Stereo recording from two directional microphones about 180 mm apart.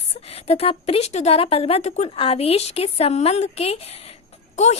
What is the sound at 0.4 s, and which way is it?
A woman's voice, 35° left (ahead or behind).